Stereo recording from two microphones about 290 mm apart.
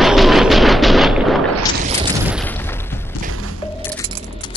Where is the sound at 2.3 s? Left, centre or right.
Centre.